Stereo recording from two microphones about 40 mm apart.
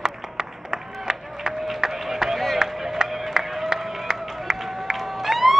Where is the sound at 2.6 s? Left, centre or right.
Centre.